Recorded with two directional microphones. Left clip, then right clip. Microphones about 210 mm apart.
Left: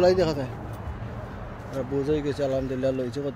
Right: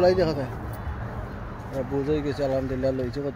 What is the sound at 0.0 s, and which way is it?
Speech, 15° left (ahead or behind).